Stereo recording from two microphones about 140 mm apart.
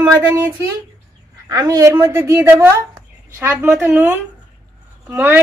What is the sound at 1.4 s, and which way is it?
A woman's voice, 25° right (ahead or behind).